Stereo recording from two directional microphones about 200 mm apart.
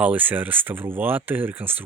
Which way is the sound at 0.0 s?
10° right (ahead or behind).